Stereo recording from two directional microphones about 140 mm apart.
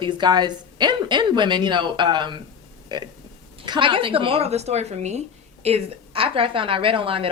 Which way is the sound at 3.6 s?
35° right (ahead or behind).